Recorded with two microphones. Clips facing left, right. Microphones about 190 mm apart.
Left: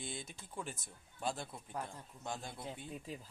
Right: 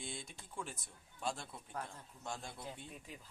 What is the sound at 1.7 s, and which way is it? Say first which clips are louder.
Speech: left 2 dB; 15° left (ahead or behind).